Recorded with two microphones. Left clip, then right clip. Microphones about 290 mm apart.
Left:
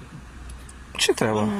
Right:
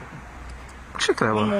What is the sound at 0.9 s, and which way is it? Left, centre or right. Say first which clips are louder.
Speech: even; left.